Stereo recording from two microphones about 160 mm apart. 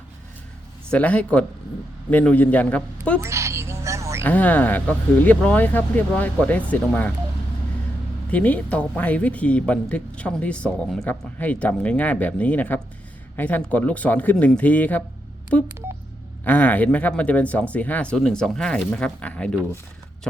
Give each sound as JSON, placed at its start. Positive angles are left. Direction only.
{"t": 0.9, "sound": "speech", "side_deg": 10}
{"t": 3.2, "sound": "a sound", "side_deg": -20}
{"t": 4.2, "sound": "speech", "side_deg": 10}
{"t": 8.3, "sound": "speech", "side_deg": 10}